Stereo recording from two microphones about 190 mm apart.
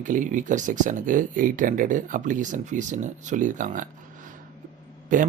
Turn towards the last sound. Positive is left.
turn(degrees=-45)  # may be behind; listen again after turning